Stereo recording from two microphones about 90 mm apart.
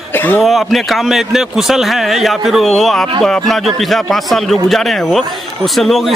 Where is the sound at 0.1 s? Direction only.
20° left (ahead or behind).